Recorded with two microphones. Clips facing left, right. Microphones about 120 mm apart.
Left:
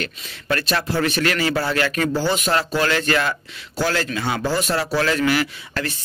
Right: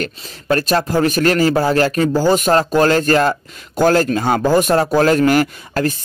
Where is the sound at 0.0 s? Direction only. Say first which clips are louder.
Right 5 dB; 40° right (ahead or behind).